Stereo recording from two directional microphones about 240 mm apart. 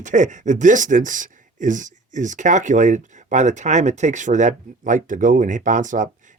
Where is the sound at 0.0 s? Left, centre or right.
Right.